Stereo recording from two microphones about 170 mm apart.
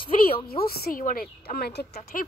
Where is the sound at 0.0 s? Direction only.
30° left (ahead or behind).